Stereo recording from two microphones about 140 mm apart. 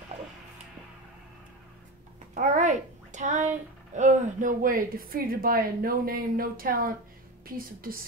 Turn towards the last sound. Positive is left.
turn(degrees=-90)